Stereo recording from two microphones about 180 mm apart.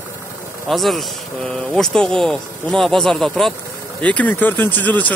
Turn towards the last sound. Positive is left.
turn(degrees=10)  # may be behind; listen again after turning